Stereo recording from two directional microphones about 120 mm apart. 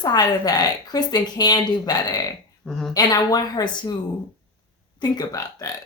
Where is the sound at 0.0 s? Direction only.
35° left (ahead or behind).